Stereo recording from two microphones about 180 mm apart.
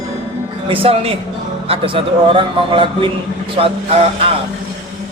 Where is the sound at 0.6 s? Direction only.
30° right (ahead or behind).